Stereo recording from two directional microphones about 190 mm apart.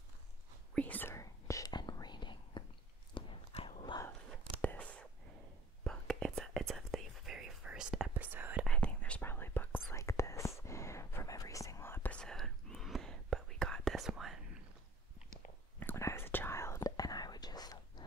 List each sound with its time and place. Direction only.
0.7 s whispering: 10° left (ahead or behind)
3.2 s a sound: 25° left (ahead or behind)
4.6 s whispering: 5° left (ahead or behind); by 8.6 s 10° right (ahead or behind)
8.6 s whispering: 5° left (ahead or behind)
15.8 s whispering: 10° left (ahead or behind)